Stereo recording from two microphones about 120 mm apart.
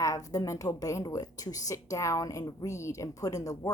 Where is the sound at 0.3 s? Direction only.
30° left (ahead or behind).